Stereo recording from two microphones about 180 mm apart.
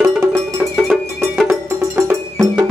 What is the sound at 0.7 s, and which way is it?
Music, centre (ahead or behind).